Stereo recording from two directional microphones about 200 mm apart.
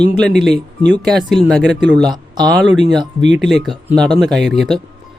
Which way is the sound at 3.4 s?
Centre (ahead or behind).